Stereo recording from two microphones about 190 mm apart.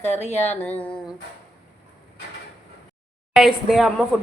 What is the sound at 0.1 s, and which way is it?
Speech, 35° left (ahead or behind).